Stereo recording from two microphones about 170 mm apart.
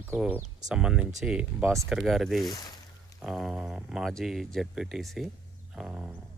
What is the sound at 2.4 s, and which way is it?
Speech, 25° left (ahead or behind).